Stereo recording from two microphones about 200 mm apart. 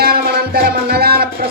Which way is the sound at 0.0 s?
50° right (ahead or behind).